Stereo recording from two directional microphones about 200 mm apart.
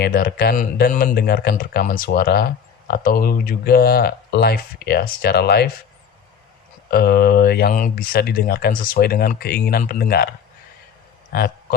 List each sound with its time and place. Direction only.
0.0 s speech: 50° left (ahead or behind)
6.9 s speech: 50° left (ahead or behind)
11.3 s speech: 50° left (ahead or behind)